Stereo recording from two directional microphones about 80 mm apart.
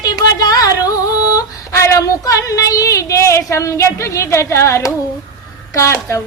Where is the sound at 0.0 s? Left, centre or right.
Left.